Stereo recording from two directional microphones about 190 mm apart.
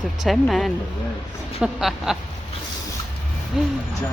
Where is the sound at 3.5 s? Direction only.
5° right (ahead or behind).